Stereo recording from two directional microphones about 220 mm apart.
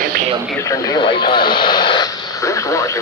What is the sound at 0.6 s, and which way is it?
Speech, 15° left (ahead or behind).